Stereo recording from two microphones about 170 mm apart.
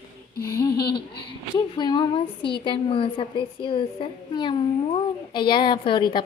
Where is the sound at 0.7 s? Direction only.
70° left (ahead or behind).